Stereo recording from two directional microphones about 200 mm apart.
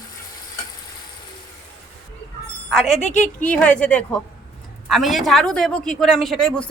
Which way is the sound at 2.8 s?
35° left (ahead or behind).